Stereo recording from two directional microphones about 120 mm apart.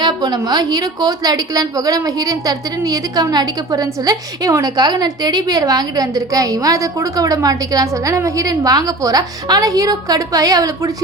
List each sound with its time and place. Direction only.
0.0 s a woman's voice: 35° right (ahead or behind)